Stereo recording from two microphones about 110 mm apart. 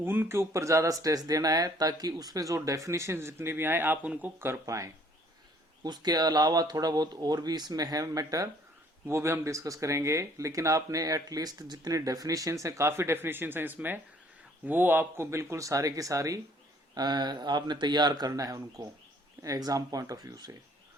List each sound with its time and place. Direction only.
0.0 s speech: 20° right (ahead or behind)
4.6 s speech: 30° right (ahead or behind)